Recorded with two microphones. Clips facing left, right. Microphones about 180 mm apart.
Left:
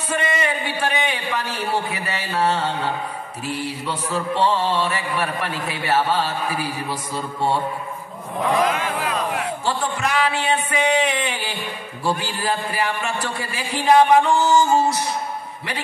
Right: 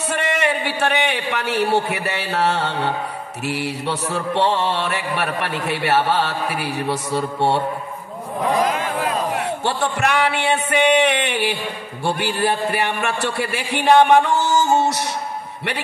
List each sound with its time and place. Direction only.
0.1 s a man's voice: 75° right (ahead or behind)
8.5 s a sound: 40° right (ahead or behind)
9.7 s a man's voice: 75° right (ahead or behind)